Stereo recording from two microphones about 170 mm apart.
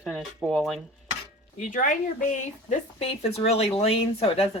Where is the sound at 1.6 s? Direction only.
50° left (ahead or behind).